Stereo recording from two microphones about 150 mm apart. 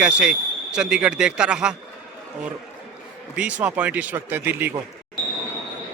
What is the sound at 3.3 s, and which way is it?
A man's voice, 10° right (ahead or behind).